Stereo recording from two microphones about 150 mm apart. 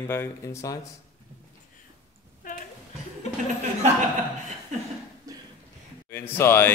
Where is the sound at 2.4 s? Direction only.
65° left (ahead or behind).